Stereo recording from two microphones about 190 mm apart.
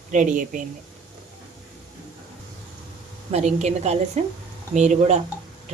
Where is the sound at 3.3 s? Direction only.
35° right (ahead or behind).